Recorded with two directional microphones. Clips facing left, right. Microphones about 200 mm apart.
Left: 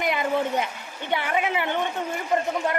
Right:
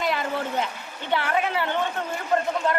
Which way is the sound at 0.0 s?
20° left (ahead or behind).